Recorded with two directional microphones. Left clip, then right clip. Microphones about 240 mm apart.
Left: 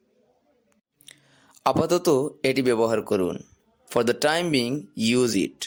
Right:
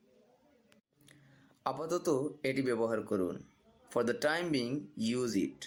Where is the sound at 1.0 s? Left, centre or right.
Left.